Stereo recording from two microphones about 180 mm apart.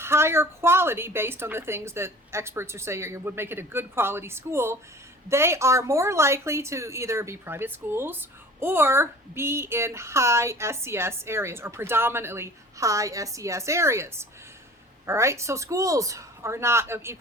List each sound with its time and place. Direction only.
0.0 s speech: 15° right (ahead or behind)